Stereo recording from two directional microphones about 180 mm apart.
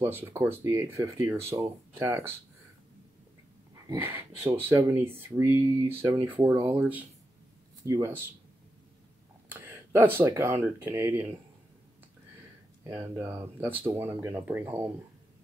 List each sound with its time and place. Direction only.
0.0 s speech: 10° right (ahead or behind)
3.8 s speech: 15° right (ahead or behind)
7.8 s speech: 15° right (ahead or behind)
9.5 s speech: 10° right (ahead or behind)
12.8 s speech: 15° right (ahead or behind)